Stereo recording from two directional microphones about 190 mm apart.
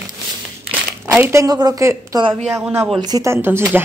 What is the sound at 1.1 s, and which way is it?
Speech, 10° right (ahead or behind).